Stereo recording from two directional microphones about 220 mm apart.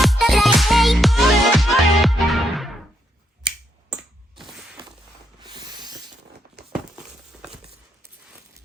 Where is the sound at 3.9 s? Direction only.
Centre (ahead or behind).